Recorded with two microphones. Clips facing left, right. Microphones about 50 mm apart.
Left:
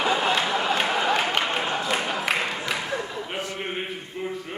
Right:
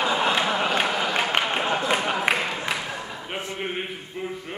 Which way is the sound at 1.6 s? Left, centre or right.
Right.